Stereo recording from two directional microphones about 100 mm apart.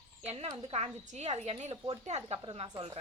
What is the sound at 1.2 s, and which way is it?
Speech, 90° right.